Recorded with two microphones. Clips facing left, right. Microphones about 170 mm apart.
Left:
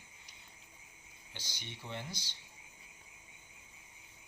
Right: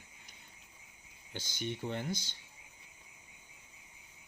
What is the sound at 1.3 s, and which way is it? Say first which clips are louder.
Speech: right 11 dB; 50° right (ahead or behind).